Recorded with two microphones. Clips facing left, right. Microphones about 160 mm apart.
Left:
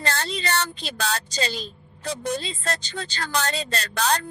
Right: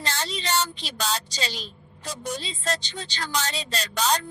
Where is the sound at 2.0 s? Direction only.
60° left (ahead or behind).